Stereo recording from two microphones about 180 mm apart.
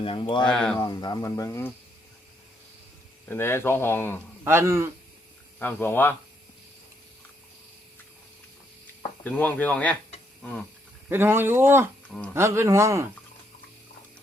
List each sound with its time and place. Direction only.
0.0 s speech: 30° left (ahead or behind)
0.5 s speech: 5° left (ahead or behind)
0.8 s speech: 20° left (ahead or behind)
3.2 s speech: 15° left (ahead or behind)
4.4 s speech: 15° right (ahead or behind)
5.5 s speech: 10° left (ahead or behind)
9.2 s speech: 10° left (ahead or behind)
11.1 s speech: 10° right (ahead or behind)